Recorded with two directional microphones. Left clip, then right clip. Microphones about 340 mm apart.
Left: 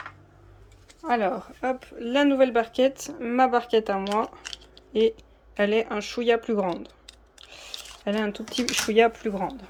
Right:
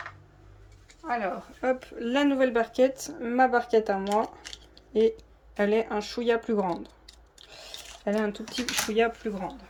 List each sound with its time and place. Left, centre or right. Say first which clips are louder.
1.0 s speech: left 5 dB; left
1.6 s speech: right 1 dB; centre
4.7 s a sound: left 1 dB; centre
5.5 s speech: left 2 dB; centre
7.8 s squish: even; centre
8.7 s speech: left 5 dB; centre